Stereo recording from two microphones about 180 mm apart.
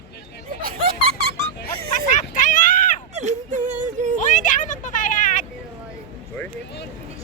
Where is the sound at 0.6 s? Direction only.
55° right (ahead or behind).